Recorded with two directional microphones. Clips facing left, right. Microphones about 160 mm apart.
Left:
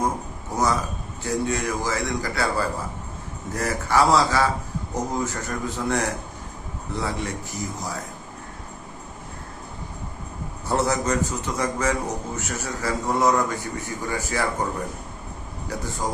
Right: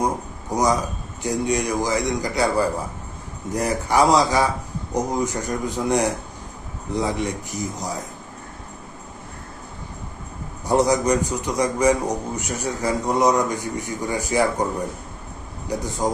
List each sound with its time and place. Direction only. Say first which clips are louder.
0.5 s a sound: right 3 dB; 15° right (ahead or behind)
1.2 s a man's voice: right 3 dB; 15° right (ahead or behind)
10.7 s a man's voice: right 5 dB; 15° right (ahead or behind)
15.7 s a man's voice: right 5 dB; 15° right (ahead or behind)